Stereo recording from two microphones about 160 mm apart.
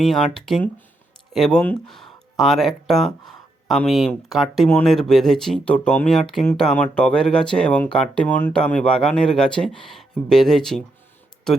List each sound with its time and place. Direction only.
0.0 s speech: centre (ahead or behind)